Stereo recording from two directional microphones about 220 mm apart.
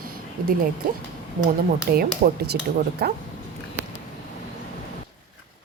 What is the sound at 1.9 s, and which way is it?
Speech, 45° right (ahead or behind).